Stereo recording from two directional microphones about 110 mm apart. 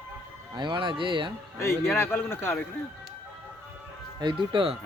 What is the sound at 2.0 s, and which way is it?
Speech, 20° left (ahead or behind).